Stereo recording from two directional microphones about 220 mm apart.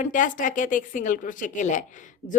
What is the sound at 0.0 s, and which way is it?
A woman's voice, 35° left (ahead or behind).